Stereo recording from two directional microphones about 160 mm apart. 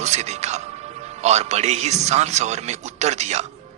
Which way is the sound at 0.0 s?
45° right (ahead or behind).